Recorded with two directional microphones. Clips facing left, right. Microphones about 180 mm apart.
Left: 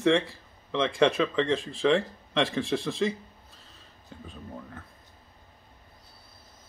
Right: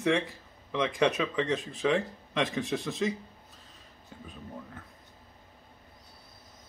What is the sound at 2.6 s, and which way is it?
Speech, 30° left (ahead or behind).